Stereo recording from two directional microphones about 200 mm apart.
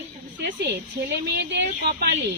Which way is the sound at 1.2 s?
55° right (ahead or behind).